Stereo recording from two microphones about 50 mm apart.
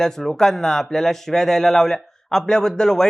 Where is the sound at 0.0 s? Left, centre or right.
Centre.